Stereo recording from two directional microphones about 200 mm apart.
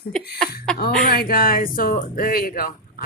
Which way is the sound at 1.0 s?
50° left (ahead or behind).